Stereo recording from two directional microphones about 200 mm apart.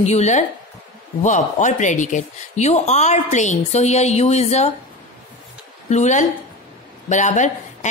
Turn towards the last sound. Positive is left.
turn(degrees=35)  # may be behind; listen again after turning